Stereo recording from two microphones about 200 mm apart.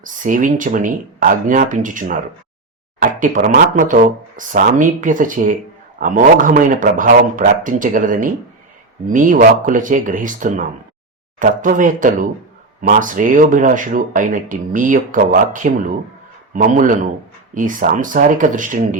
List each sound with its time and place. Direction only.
0.0 s a man's voice: 40° right (ahead or behind)